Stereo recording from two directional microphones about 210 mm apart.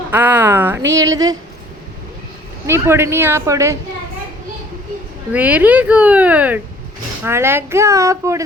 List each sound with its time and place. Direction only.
0.1 s speech: 10° right (ahead or behind)
2.6 s speech: 10° right (ahead or behind)
5.3 s speech: 5° right (ahead or behind)